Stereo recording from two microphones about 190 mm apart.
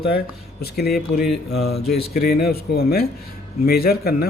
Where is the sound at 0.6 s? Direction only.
55° left (ahead or behind).